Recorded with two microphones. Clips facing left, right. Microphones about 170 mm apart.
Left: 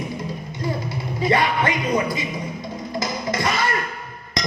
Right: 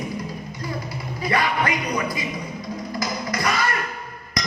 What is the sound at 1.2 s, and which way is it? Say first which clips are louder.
Speech: left 3 dB; 25° left (ahead or behind).